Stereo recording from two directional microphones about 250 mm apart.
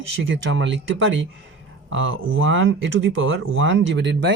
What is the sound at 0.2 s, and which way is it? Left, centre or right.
Speech, right.